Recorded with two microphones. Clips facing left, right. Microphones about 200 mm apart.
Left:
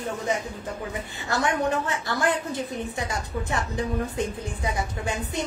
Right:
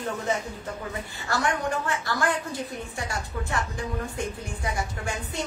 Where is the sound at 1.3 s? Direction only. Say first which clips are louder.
Left 2 dB; 20° left (ahead or behind).